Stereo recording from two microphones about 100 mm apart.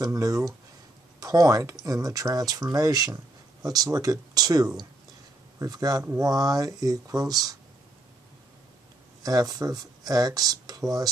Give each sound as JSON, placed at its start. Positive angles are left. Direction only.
{"t": 0.0, "sound": "speech", "side_deg": -35}
{"t": 9.2, "sound": "speech", "side_deg": -40}